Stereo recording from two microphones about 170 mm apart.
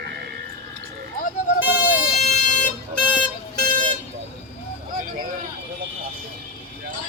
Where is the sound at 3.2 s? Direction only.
25° left (ahead or behind).